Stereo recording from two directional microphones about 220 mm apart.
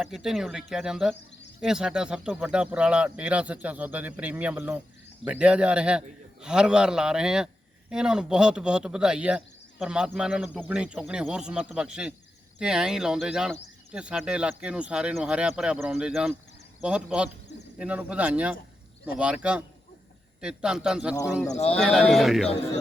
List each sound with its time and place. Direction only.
0.0 s a man's voice: centre (ahead or behind)
21.5 s speech: 30° left (ahead or behind)
21.8 s a man's voice: centre (ahead or behind)